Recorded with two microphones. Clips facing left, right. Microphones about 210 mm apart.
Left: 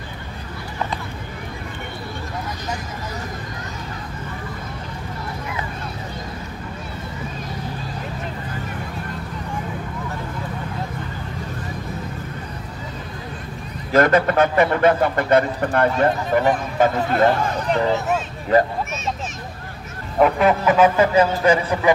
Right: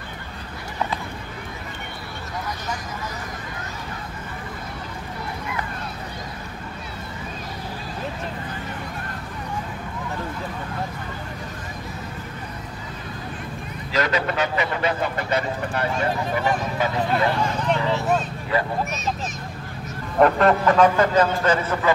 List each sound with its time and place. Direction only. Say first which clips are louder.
13.9 s a man's voice: left 8 dB; 50° left (ahead or behind)
20.2 s speech: even; 5° left (ahead or behind)